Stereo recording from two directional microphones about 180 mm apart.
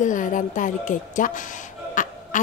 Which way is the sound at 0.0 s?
45° left (ahead or behind).